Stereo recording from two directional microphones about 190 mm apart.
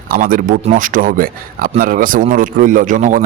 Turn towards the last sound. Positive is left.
turn(degrees=-45)  # may be behind; listen again after turning